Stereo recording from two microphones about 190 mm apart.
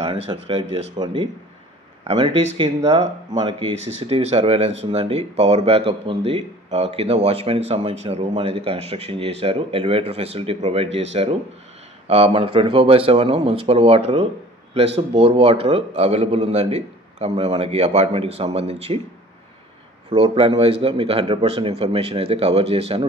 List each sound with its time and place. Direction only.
0.0 s speech: 30° right (ahead or behind)
20.1 s speech: 30° right (ahead or behind)